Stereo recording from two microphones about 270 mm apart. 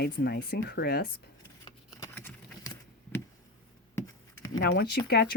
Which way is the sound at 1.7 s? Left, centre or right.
Centre.